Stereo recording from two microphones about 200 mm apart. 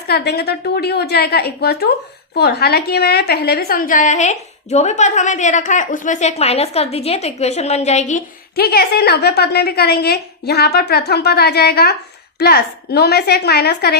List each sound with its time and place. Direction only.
0.1 s a woman's voice: 55° left (ahead or behind)